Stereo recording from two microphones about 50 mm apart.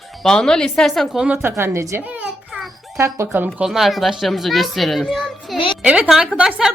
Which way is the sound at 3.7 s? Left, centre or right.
Centre.